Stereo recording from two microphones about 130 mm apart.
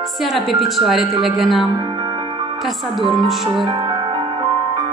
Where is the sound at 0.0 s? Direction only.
Centre (ahead or behind).